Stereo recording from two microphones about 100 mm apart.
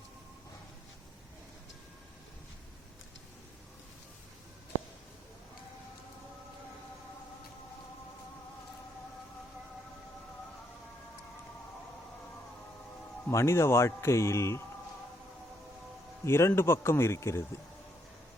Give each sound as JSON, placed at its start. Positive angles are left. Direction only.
{"t": 13.3, "sound": "a man's voice", "side_deg": 25}
{"t": 16.2, "sound": "a man's voice", "side_deg": 25}